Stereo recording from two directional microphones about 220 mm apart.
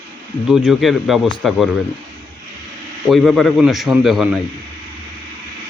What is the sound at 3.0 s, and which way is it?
A man's voice, centre (ahead or behind).